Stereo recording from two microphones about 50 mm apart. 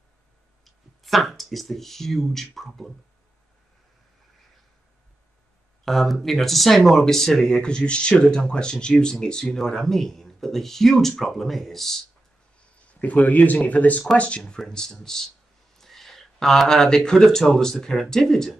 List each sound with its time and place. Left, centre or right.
0.7 s speech: centre
5.9 s speech: centre
13.0 s speech: left
14.6 s speech: centre